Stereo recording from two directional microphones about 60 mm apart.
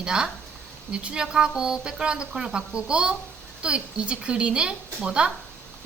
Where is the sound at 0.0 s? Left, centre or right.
Centre.